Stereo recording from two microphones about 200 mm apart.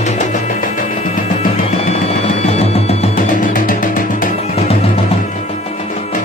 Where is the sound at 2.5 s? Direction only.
30° left (ahead or behind).